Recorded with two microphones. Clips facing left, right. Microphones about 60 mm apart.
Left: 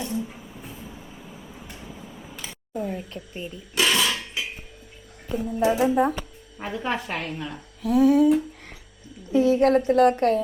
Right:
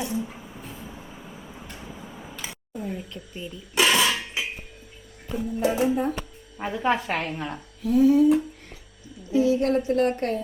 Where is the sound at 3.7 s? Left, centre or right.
Centre.